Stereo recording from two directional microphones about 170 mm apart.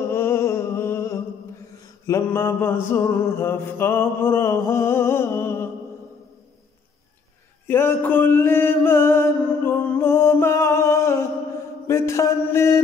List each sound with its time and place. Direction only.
0.1 s music: 15° left (ahead or behind)
2.0 s mantra: 15° left (ahead or behind)
7.6 s music: 10° left (ahead or behind)
11.9 s mantra: 15° left (ahead or behind)